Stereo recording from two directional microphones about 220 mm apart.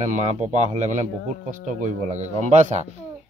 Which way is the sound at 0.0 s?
30° right (ahead or behind).